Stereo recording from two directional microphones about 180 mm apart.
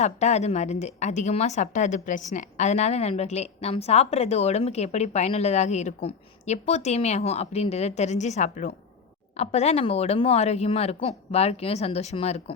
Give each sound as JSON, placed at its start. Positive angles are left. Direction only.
{"t": 0.0, "sound": "a woman's voice", "side_deg": 40}